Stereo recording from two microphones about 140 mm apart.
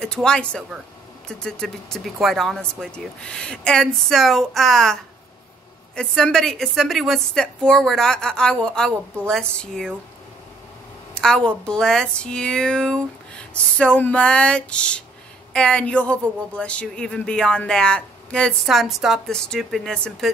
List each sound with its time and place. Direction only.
0.0 s speech: 5° left (ahead or behind)
11.1 s speech: 5° left (ahead or behind)